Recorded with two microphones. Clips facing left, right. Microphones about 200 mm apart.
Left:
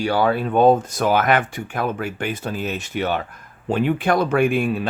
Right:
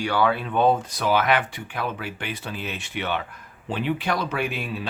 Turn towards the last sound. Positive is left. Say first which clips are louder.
# left 9 dB
turn(degrees=50)  # may be behind; listen again after turning